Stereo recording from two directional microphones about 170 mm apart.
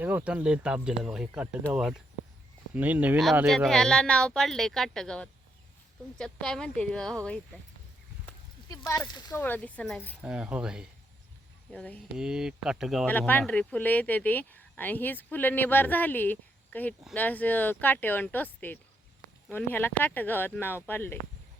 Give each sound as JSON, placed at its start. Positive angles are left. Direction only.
{"t": 0.0, "sound": "speech", "side_deg": -10}
{"t": 8.9, "sound": "speech", "side_deg": 25}
{"t": 9.4, "sound": "speech", "side_deg": 10}
{"t": 10.2, "sound": "speech", "side_deg": -5}
{"t": 11.7, "sound": "speech", "side_deg": 5}
{"t": 12.1, "sound": "speech", "side_deg": -5}
{"t": 13.1, "sound": "speech", "side_deg": 10}